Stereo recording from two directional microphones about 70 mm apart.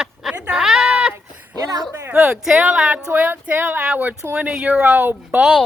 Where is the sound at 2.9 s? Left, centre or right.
Centre.